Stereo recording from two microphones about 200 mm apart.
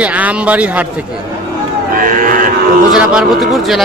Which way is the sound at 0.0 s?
5° right (ahead or behind).